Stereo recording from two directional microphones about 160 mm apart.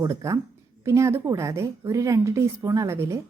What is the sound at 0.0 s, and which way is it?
A woman's voice, 20° right (ahead or behind).